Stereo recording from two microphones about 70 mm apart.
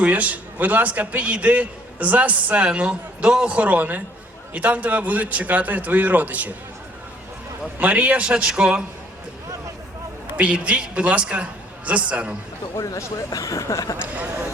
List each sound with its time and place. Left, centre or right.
0.0 s a man's voice: right
7.8 s a man's voice: right
10.3 s a woman's voice: centre
12.7 s speech: left
14.0 s a man's voice: right